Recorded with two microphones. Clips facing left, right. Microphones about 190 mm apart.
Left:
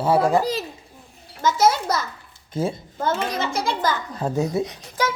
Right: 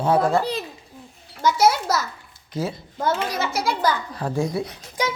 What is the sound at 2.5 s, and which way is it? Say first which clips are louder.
Speech: left 2 dB; 25° left (ahead or behind).